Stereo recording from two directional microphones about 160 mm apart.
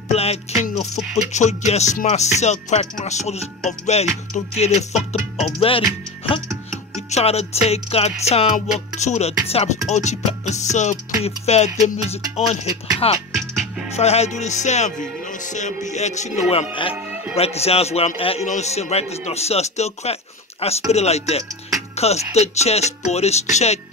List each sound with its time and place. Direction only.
0.1 s music: 40° left (ahead or behind)
7.0 s a man's voice: 40° left (ahead or behind)
8.5 s music: 45° left (ahead or behind)
17.4 s a man's voice: 40° left (ahead or behind)
21.9 s music: 40° left (ahead or behind)